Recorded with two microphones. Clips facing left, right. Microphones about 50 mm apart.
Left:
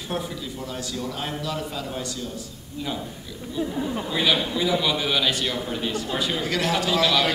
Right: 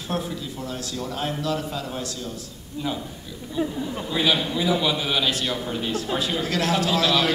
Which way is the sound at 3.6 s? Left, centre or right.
Right.